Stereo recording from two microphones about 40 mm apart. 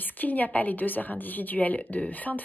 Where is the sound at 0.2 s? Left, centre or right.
Left.